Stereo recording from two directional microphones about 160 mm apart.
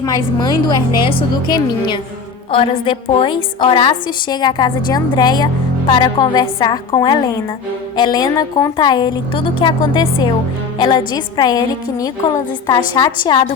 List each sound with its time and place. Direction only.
0.0 s a woman's voice: 25° left (ahead or behind)